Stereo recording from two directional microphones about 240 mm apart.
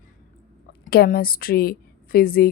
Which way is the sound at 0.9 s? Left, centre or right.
Left.